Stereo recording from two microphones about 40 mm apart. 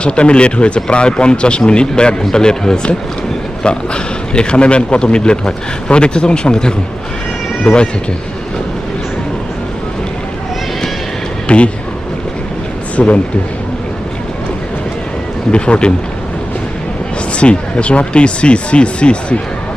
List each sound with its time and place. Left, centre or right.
0.0 s a man's voice: left
11.4 s speech: left
13.0 s a man's voice: left
15.5 s a man's voice: left
17.3 s a man's voice: left